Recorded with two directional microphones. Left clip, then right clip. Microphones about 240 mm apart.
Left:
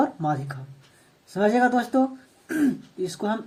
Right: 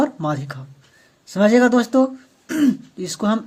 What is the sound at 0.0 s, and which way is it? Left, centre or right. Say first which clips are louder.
Speech: right 3 dB; right.